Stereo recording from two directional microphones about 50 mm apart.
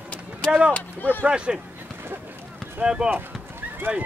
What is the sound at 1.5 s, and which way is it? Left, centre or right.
Speech, centre.